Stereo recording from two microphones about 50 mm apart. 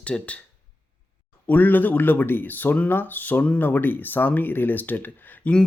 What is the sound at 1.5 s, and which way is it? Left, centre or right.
Speech, left.